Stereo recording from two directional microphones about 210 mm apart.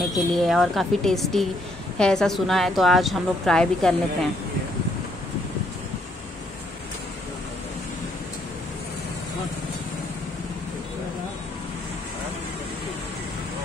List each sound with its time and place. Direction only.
0.1 s a woman's voice: centre (ahead or behind)